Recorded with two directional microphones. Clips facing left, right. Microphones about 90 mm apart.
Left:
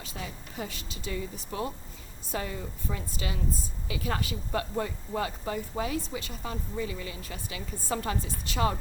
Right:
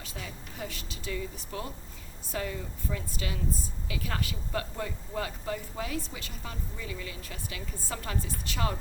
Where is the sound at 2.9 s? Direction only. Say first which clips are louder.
Even; 25° left (ahead or behind).